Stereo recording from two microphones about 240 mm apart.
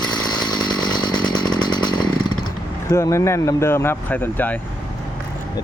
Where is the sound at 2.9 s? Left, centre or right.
Centre.